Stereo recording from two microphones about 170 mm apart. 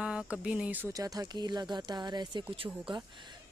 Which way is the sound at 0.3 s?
5° right (ahead or behind).